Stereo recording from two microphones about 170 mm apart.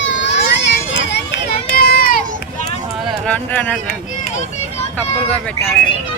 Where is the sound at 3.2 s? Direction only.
10° left (ahead or behind).